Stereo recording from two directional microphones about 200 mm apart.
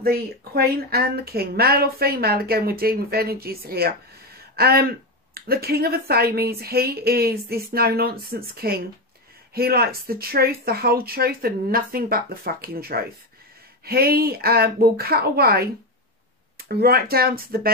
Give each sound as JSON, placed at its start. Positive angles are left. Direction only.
{"t": 0.0, "sound": "speech", "side_deg": -50}